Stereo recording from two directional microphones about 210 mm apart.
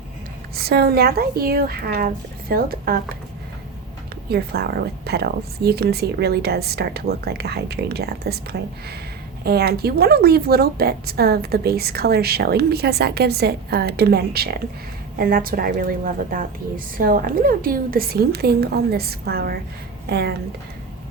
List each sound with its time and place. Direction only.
0.5 s a woman's voice: 50° right (ahead or behind)
4.3 s a woman's voice: 50° right (ahead or behind)